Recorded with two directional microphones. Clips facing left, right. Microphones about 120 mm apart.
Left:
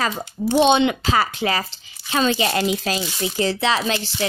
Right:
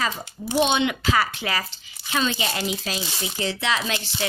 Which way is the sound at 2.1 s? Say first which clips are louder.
Left 6 dB; 50° left (ahead or behind).